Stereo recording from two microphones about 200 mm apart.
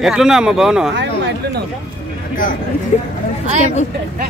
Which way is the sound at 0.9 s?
60° right (ahead or behind).